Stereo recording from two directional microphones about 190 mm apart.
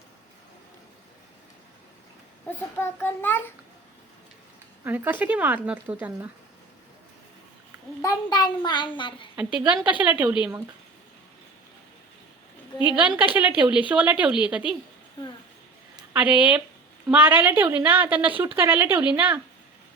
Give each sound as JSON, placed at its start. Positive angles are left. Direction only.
{"t": 2.5, "sound": "a child's voice", "side_deg": 10}
{"t": 4.8, "sound": "speech", "side_deg": -10}
{"t": 8.0, "sound": "a child's voice", "side_deg": 20}
{"t": 9.3, "sound": "speech", "side_deg": -5}
{"t": 13.1, "sound": "speech", "side_deg": -10}
{"t": 16.0, "sound": "a woman's voice", "side_deg": -5}